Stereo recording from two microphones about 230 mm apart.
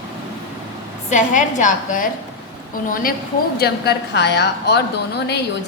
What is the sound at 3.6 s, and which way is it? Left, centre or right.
A woman's voice, left.